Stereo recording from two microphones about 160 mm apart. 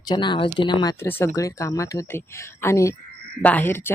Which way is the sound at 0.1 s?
30° left (ahead or behind).